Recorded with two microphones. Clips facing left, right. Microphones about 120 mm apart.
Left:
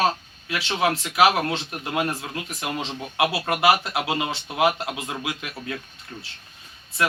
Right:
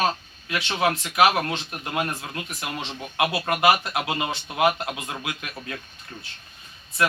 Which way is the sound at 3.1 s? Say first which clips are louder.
Left 1 dB; 5° left (ahead or behind).